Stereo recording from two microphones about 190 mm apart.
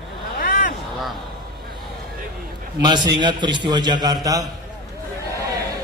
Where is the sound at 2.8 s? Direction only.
25° right (ahead or behind).